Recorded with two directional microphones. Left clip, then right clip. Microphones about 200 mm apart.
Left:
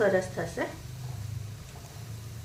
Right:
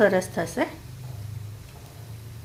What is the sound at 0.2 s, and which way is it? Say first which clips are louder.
Speech: right 5 dB; 55° right (ahead or behind).